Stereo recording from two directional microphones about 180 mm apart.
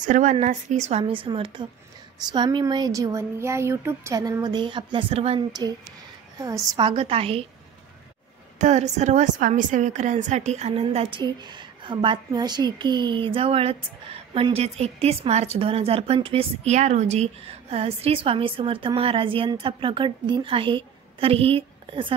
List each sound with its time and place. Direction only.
0.0 s a woman's voice: 45° right (ahead or behind)
8.5 s a woman's voice: 40° right (ahead or behind)